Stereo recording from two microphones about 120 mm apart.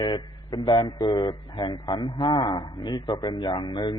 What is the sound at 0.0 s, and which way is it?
A man's voice, 35° left (ahead or behind).